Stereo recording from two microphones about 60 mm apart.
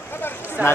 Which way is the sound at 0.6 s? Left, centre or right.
Right.